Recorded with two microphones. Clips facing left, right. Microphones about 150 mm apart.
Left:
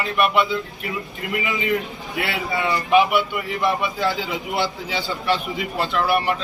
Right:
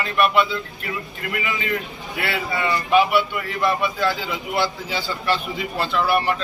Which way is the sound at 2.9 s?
15° left (ahead or behind).